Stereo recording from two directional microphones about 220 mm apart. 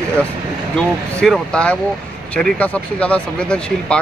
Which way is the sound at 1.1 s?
5° left (ahead or behind).